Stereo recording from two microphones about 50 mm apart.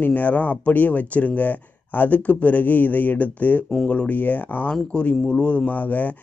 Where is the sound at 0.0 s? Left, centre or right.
Left.